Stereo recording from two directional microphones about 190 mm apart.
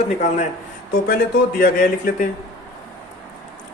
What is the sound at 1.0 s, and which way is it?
Speech, 50° left (ahead or behind).